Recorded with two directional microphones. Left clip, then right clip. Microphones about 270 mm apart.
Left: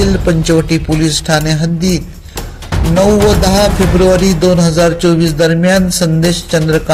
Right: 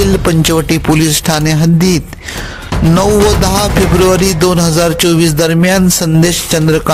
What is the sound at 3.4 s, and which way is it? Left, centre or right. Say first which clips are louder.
Music: left 1 dB; right.